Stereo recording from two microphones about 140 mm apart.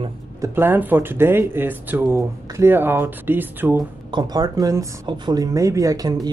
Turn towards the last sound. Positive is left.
turn(degrees=-25)  # may be behind; listen again after turning